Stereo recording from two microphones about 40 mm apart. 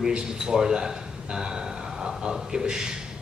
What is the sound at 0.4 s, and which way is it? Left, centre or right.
A man's voice, centre.